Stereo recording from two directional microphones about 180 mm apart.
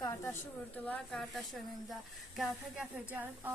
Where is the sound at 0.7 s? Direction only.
10° left (ahead or behind).